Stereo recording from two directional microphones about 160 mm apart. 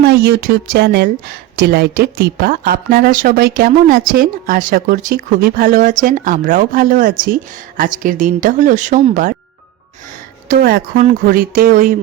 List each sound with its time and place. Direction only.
0.0 s a woman's voice: 80° right; by 9.3 s 55° right (ahead or behind)
10.5 s speech: 70° right (ahead or behind)
11.1 s a woman's voice: 60° right (ahead or behind)